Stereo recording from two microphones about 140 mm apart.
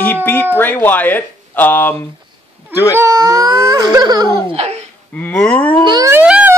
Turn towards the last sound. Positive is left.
turn(degrees=-10)  # may be behind; listen again after turning